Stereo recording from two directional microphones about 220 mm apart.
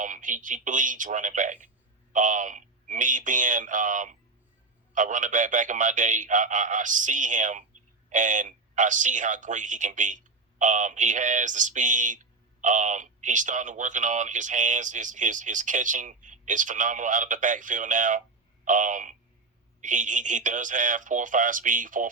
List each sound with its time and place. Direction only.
0.0 s speech: 35° right (ahead or behind)